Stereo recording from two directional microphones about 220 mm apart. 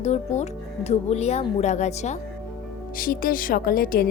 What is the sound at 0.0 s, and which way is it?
A woman's voice, 30° left (ahead or behind).